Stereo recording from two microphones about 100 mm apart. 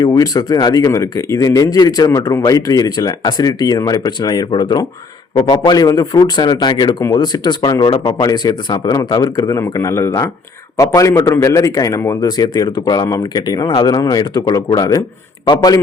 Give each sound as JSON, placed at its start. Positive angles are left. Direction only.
{"t": 0.0, "sound": "speech", "side_deg": 40}
{"t": 15.5, "sound": "a man's voice", "side_deg": 60}